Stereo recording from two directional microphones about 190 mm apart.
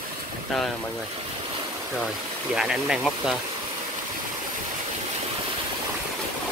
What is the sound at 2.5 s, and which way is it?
Speech, centre (ahead or behind).